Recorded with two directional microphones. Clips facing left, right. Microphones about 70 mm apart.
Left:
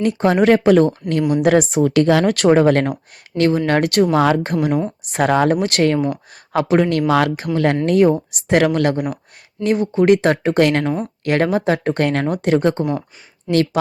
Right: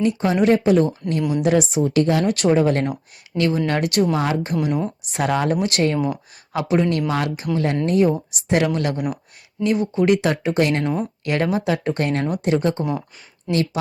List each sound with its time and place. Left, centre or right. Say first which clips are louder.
0.0 s speech: left 3 dB; left
0.5 s speech: left 4 dB; left
1.4 s speech: left 3 dB; left
1.8 s speech: left 4 dB; left
3.3 s speech: left 4 dB; left
4.8 s speech: left 3 dB; centre
5.1 s speech: left 5 dB; left
7.1 s speech: left 6 dB; left
10.8 s speech: left 2 dB; centre
11.2 s speech: left 6 dB; left